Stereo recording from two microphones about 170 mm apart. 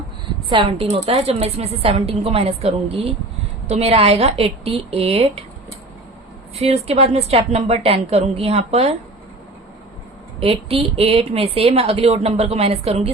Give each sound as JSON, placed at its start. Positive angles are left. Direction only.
{"t": 0.4, "sound": "a woman's voice", "side_deg": -30}
{"t": 6.6, "sound": "a woman's voice", "side_deg": -35}
{"t": 10.4, "sound": "a woman's voice", "side_deg": -35}